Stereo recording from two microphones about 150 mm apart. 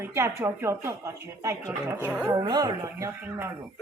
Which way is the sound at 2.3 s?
30° right (ahead or behind).